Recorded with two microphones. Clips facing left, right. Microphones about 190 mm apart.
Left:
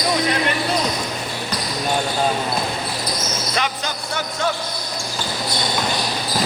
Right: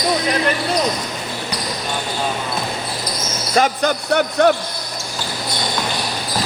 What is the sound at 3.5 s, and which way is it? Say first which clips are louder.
Basketball bounce: right 11 dB; 45° right (ahead or behind).